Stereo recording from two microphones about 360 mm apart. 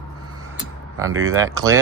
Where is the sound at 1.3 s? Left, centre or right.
Centre.